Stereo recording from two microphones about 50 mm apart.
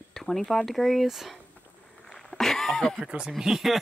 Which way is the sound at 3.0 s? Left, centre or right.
Centre.